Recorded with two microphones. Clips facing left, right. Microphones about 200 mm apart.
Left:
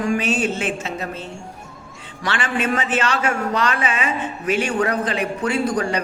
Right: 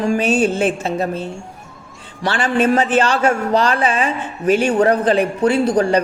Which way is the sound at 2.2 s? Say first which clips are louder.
Right 6 dB; 35° right (ahead or behind).